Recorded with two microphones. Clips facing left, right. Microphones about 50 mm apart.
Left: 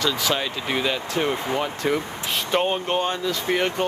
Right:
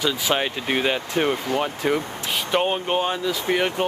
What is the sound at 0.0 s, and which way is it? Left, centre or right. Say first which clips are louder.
Speech: right 1 dB; centre.